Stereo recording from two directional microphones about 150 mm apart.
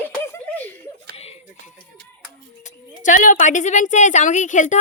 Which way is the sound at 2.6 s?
60° left (ahead or behind).